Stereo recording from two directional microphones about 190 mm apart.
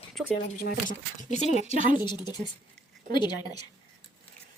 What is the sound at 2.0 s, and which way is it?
A woman's voice, 20° left (ahead or behind).